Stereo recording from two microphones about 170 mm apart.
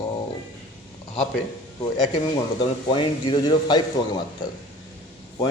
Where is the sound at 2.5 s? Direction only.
25° left (ahead or behind).